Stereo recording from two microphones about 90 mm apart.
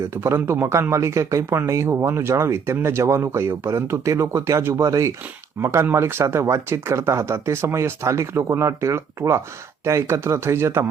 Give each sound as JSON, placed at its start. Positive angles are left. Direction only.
{"t": 0.2, "sound": "speech", "side_deg": -25}